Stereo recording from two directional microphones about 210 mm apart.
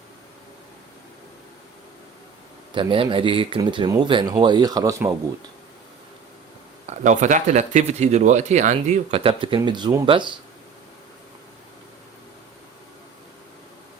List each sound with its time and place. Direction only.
2.7 s speech: 25° right (ahead or behind)
6.8 s speech: 35° right (ahead or behind)